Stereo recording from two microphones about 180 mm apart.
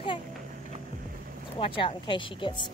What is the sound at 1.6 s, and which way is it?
Speech, 30° left (ahead or behind).